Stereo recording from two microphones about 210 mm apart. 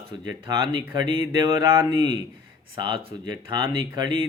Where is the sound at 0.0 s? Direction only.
20° right (ahead or behind).